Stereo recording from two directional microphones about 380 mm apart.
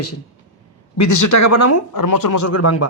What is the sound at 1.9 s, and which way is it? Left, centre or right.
Speech, left.